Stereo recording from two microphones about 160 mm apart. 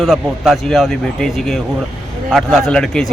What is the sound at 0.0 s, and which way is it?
Speech, centre (ahead or behind).